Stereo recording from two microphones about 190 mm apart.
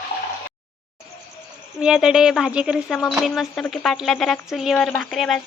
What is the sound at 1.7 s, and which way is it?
Speech, 5° right (ahead or behind).